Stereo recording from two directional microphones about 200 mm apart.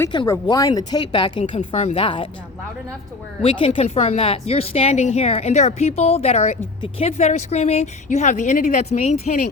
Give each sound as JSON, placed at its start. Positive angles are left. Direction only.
{"t": 0.0, "sound": "speech", "side_deg": 20}
{"t": 1.5, "sound": "a woman's voice", "side_deg": 35}
{"t": 3.4, "sound": "a woman's voice", "side_deg": 25}